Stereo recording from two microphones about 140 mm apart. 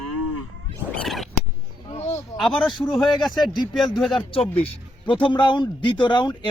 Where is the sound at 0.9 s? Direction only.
5° left (ahead or behind).